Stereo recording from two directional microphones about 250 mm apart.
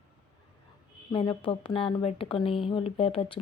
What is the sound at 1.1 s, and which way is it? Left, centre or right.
Speech, centre.